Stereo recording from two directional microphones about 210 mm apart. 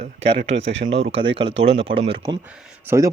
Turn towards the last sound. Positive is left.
turn(degrees=-15)  # may be behind; listen again after turning